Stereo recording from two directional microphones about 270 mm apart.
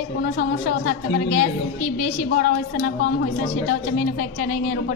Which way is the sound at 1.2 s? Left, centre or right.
Left.